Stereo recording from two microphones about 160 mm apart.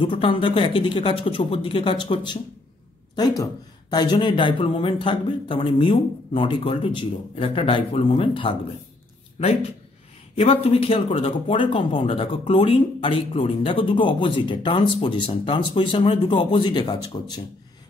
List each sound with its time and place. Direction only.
0.0 s speech: 30° left (ahead or behind)